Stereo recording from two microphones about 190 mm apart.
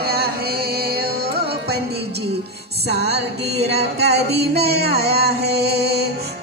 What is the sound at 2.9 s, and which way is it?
Music, 60° right (ahead or behind).